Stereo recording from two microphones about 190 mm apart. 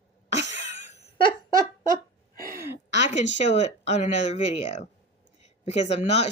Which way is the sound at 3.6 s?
35° left (ahead or behind).